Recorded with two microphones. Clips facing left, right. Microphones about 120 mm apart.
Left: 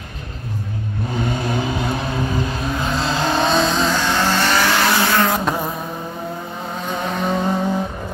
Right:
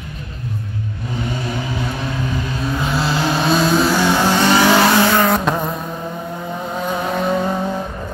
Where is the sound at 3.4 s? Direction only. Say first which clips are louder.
Right 5 dB; 5° right (ahead or behind).